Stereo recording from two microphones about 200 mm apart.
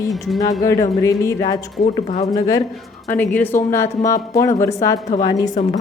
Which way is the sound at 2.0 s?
35° left (ahead or behind).